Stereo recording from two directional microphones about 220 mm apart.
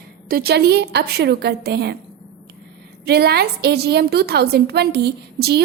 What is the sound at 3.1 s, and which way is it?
A woman's voice, 45° right (ahead or behind).